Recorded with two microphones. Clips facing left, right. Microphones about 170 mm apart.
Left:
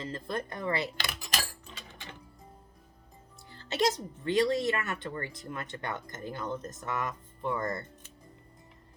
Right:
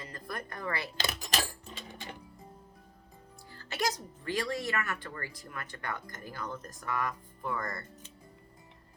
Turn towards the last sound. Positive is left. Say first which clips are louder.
# left 4 dB
turn(degrees=25)  # may be behind; listen again after turning